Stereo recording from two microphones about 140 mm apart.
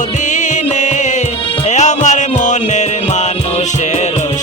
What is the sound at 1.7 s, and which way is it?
Music, 55° left (ahead or behind).